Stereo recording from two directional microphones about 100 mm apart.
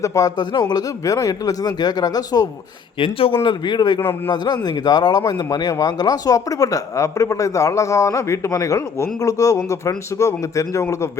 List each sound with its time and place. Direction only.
0.0 s speech: 35° left (ahead or behind)
3.0 s speech: 65° left (ahead or behind)
3.4 s speech: 45° left (ahead or behind); by 11.1 s 30° left (ahead or behind)